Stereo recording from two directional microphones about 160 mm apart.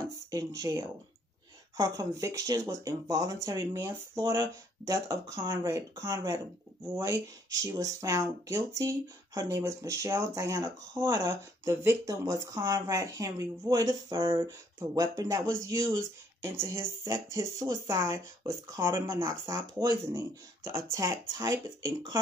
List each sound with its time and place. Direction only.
0.3 s speech: 20° right (ahead or behind)